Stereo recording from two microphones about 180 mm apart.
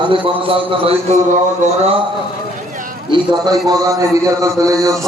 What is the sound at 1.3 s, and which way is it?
Speech, 40° right (ahead or behind).